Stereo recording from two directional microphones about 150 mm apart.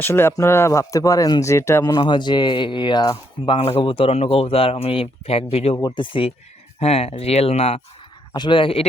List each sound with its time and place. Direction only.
0.0 s speech: 15° left (ahead or behind)
2.0 s speech: 30° left (ahead or behind)
5.7 s speech: 30° left (ahead or behind)